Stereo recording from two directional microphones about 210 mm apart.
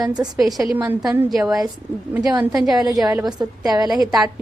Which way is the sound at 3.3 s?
20° right (ahead or behind).